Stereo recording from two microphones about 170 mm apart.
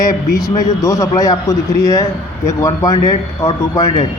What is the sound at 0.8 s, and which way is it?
A man's voice, 20° left (ahead or behind).